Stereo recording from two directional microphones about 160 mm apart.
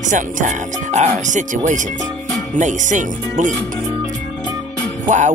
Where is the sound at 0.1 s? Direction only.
50° right (ahead or behind).